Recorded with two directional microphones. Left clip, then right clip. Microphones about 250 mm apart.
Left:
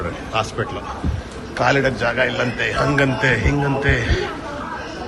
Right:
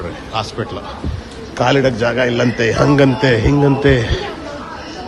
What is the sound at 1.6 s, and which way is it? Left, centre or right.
A man's voice, right.